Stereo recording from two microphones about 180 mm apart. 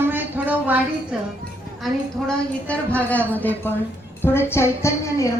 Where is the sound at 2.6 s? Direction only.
10° left (ahead or behind).